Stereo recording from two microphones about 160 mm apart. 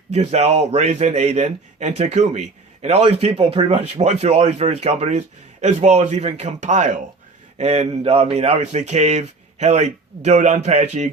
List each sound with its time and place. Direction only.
0.1 s a man's voice: 45° right (ahead or behind)